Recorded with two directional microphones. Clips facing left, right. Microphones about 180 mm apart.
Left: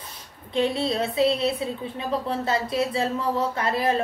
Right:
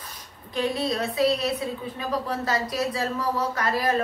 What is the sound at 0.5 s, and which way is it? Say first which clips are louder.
A woman's voice: left 2 dB; 25° left (ahead or behind).